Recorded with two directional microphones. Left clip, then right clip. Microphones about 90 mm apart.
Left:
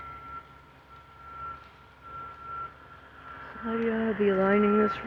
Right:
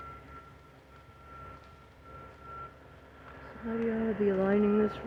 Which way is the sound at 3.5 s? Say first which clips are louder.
Left 4 dB; 30° right (ahead or behind).